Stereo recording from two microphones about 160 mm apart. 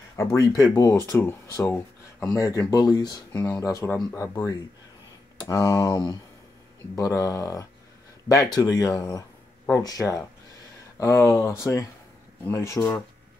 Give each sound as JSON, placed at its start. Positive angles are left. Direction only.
{"t": 0.4, "sound": "speech", "side_deg": 25}
{"t": 8.7, "sound": "speech", "side_deg": 20}